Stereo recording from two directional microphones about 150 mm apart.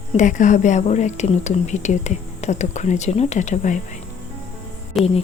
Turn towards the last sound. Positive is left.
turn(degrees=0)  # may be behind; listen again after turning